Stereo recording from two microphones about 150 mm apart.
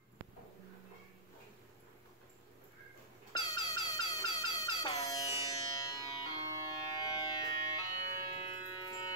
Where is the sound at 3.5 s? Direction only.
25° left (ahead or behind).